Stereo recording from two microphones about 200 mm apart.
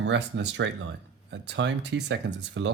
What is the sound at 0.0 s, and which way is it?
Speech, 60° right (ahead or behind).